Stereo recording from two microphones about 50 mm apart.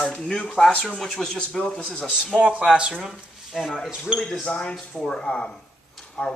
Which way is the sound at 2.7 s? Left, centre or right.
Centre.